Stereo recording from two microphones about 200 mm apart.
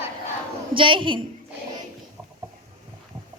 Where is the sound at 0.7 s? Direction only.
25° right (ahead or behind).